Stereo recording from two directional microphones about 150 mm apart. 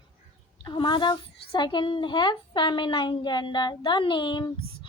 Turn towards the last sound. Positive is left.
turn(degrees=30)  # may be behind; listen again after turning